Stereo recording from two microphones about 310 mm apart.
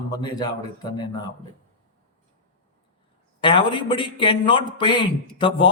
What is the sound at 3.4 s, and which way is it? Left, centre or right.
Speech, centre.